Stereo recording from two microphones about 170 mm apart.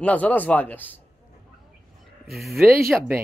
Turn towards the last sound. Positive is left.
turn(degrees=-5)  # may be behind; listen again after turning